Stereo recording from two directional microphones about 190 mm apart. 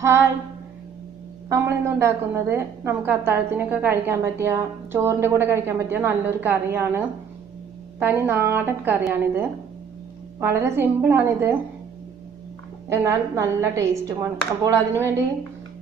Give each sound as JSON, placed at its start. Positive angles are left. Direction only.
{"t": 0.0, "sound": "a sound", "side_deg": -10}
{"t": 1.5, "sound": "a woman's voice", "side_deg": -15}
{"t": 8.0, "sound": "a woman's voice", "side_deg": -10}
{"t": 10.4, "sound": "a woman's voice", "side_deg": -10}
{"t": 12.9, "sound": "a woman's voice", "side_deg": -15}